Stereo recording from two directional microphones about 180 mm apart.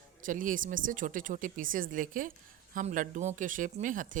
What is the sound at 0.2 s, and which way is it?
Speech, 50° right (ahead or behind).